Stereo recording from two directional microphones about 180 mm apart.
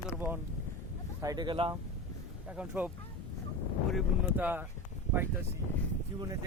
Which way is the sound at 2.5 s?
10° right (ahead or behind).